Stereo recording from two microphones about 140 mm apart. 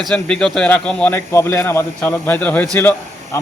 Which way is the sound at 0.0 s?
5° left (ahead or behind).